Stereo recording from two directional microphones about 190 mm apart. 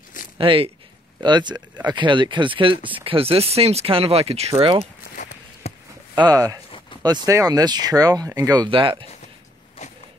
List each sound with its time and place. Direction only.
0.4 s speech: 30° right (ahead or behind)
5.1 s walk: 40° left (ahead or behind)
6.1 s speech: 20° right (ahead or behind)